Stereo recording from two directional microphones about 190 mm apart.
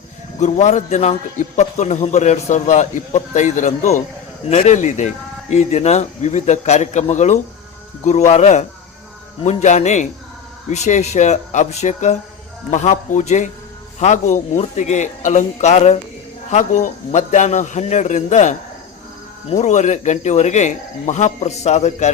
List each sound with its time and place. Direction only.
0.3 s a man's voice: 40° left (ahead or behind)